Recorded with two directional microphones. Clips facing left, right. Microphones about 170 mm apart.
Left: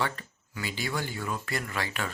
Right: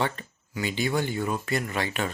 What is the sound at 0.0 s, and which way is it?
Speech, 20° right (ahead or behind).